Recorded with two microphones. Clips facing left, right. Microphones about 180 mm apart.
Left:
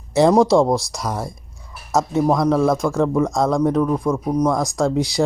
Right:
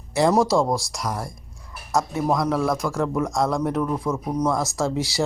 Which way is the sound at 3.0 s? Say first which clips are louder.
Left 4 dB; 15° left (ahead or behind).